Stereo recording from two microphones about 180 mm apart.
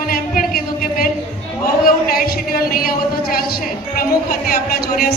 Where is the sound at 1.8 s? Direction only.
55° left (ahead or behind).